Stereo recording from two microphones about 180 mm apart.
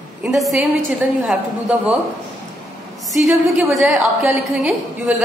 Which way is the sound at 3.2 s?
Centre (ahead or behind).